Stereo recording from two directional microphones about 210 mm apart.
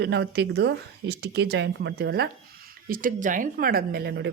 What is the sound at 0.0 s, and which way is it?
Speech, 55° right (ahead or behind).